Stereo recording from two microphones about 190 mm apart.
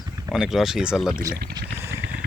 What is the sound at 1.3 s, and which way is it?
Speech, 55° right (ahead or behind).